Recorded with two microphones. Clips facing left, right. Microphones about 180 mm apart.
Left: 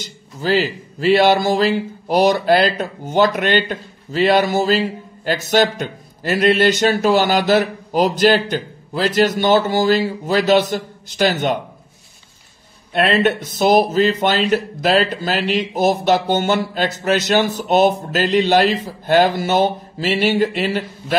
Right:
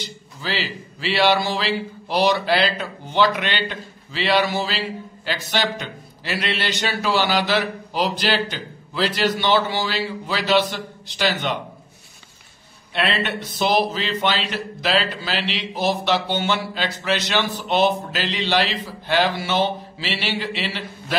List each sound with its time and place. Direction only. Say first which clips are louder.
0.0 s a man's voice: left 7 dB; 45° left (ahead or behind)
12.9 s a man's voice: left 8 dB; 45° left (ahead or behind)